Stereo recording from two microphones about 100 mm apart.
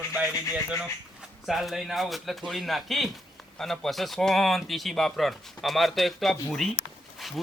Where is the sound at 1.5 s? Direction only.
Centre (ahead or behind).